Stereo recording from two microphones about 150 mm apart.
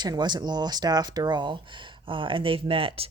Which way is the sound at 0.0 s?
30° right (ahead or behind).